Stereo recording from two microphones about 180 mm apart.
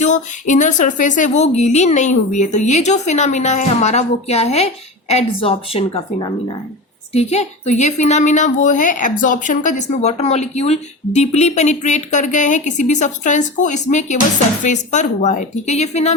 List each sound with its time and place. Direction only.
0.0 s a woman's voice: 45° left (ahead or behind)